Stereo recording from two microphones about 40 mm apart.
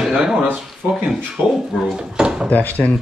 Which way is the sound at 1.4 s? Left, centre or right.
Right.